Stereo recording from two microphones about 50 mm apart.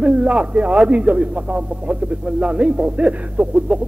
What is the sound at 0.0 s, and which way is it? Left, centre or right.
Speech, right.